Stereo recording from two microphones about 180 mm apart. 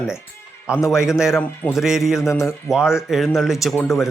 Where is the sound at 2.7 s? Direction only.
5° right (ahead or behind).